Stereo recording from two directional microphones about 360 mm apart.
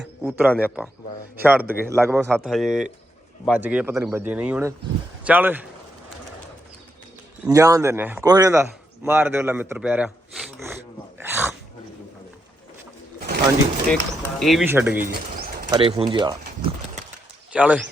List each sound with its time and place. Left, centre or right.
0.0 s speech: centre
7.4 s speech: centre
11.2 s dog: centre
13.1 s pigeon: right
13.9 s speech: centre
15.1 s bird: right
15.7 s speech: centre
17.5 s speech: centre